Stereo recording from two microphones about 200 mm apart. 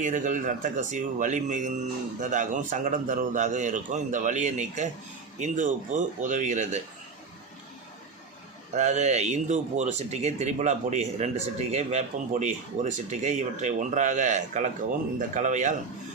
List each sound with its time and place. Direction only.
0.0 s speech: 40° right (ahead or behind)
8.7 s speech: 35° right (ahead or behind)